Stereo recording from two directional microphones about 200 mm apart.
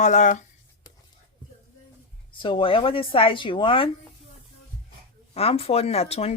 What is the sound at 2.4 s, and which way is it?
Speech, 25° left (ahead or behind).